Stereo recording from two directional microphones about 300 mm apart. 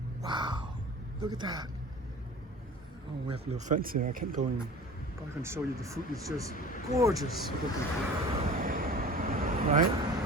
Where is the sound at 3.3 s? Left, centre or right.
Right.